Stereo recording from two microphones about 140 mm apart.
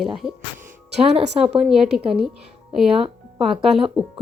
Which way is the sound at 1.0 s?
45° right (ahead or behind).